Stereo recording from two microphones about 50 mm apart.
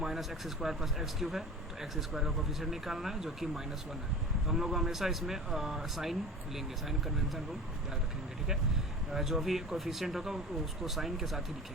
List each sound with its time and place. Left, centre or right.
0.0 s speech: centre
9.1 s speech: centre